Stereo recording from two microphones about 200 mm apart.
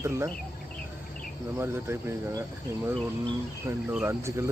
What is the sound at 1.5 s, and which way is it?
Speech, 10° right (ahead or behind).